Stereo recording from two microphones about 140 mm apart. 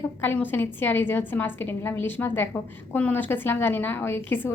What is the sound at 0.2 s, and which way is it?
A woman's voice, 15° left (ahead or behind).